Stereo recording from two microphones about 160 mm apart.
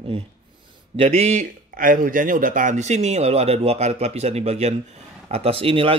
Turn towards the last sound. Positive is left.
turn(degrees=-35)  # may be behind; listen again after turning